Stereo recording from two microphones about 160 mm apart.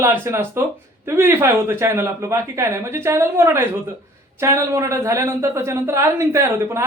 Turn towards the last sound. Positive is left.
turn(degrees=-15)  # may be behind; listen again after turning